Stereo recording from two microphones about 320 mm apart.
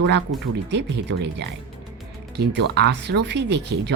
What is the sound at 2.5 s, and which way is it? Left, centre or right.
Speech, right.